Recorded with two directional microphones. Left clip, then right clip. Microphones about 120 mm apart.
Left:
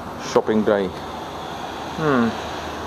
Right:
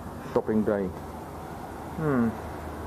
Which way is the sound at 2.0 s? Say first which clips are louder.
Left 8 dB; 35° left (ahead or behind).